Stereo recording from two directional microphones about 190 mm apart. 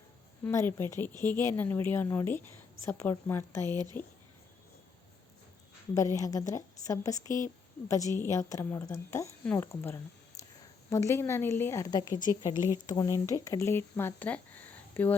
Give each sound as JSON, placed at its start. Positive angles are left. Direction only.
{"t": 0.4, "sound": "speech", "side_deg": 15}
{"t": 3.7, "sound": "speech", "side_deg": -20}
{"t": 6.1, "sound": "speech", "side_deg": 20}
{"t": 12.5, "sound": "speech", "side_deg": -15}
{"t": 12.8, "sound": "speech", "side_deg": 20}